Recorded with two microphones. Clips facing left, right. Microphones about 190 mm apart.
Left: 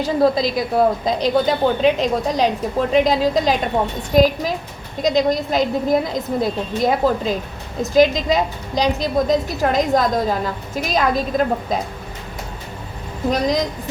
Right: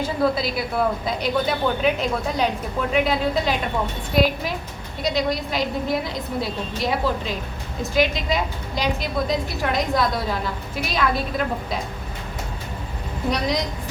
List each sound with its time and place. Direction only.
0.0 s a woman's voice: 40° left (ahead or behind)